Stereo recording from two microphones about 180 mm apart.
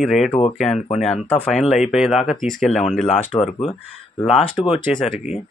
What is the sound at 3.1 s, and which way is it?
Speech, 35° left (ahead or behind).